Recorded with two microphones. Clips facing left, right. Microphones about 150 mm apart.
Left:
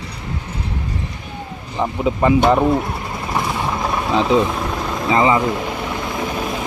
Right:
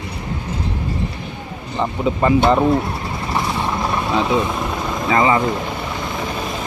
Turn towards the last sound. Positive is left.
turn(degrees=20)  # may be behind; listen again after turning